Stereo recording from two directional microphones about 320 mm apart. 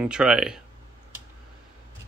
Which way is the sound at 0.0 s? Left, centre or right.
Centre.